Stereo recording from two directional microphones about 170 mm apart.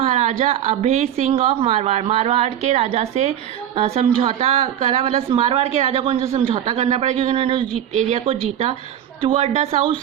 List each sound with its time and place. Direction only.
0.0 s a woman's voice: 45° right (ahead or behind)
7.9 s a woman's voice: 40° right (ahead or behind)